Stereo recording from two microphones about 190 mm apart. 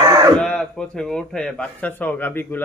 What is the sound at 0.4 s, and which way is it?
A man's voice, 5° left (ahead or behind).